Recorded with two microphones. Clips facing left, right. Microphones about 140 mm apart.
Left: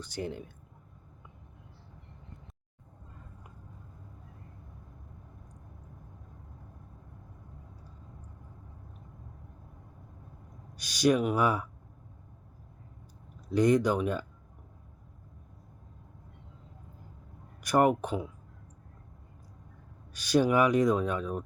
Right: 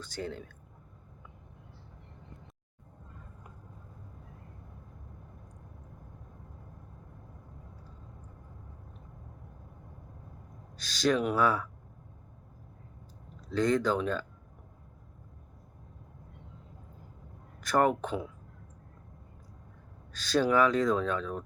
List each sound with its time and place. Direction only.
0.0 s speech: 15° left (ahead or behind)
10.8 s speech: 15° left (ahead or behind)
13.5 s speech: 15° left (ahead or behind)
17.6 s speech: 15° left (ahead or behind)
20.1 s speech: 15° left (ahead or behind)